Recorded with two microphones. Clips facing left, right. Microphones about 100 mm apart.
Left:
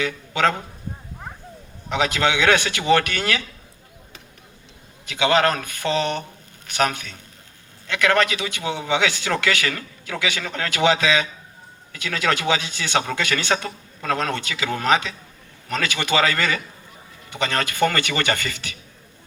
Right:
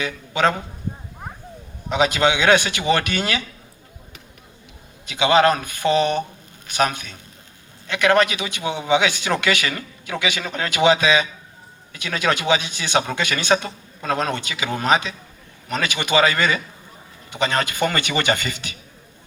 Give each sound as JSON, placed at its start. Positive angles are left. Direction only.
{"t": 0.0, "sound": "a man's voice", "side_deg": -20}
{"t": 1.9, "sound": "a man's voice", "side_deg": -20}
{"t": 5.0, "sound": "a man's voice", "side_deg": -15}